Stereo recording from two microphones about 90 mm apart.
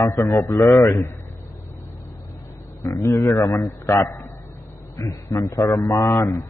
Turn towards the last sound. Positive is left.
turn(degrees=30)  # may be behind; listen again after turning